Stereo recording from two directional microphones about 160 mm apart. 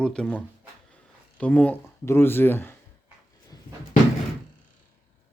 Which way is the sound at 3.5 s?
25° left (ahead or behind).